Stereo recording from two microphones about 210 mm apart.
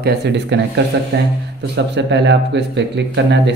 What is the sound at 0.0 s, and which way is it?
Speech, 50° right (ahead or behind).